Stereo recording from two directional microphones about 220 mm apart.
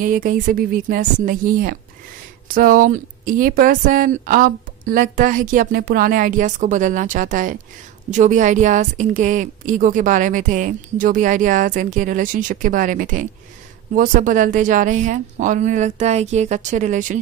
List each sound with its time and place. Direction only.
0.0 s speech: 40° right (ahead or behind)